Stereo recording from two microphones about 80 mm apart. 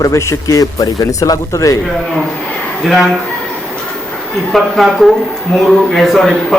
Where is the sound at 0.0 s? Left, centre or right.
Left.